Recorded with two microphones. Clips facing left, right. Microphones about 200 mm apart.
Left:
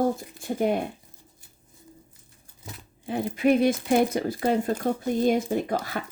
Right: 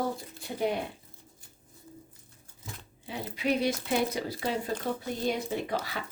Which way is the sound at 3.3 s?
50° left (ahead or behind).